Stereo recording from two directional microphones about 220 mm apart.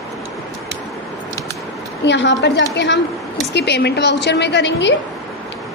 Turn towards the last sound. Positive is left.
turn(degrees=55)  # may be behind; listen again after turning